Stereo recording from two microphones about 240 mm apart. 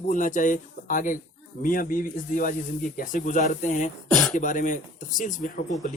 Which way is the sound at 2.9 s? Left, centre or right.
Left.